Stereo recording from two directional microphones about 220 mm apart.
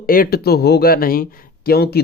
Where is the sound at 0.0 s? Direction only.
40° left (ahead or behind).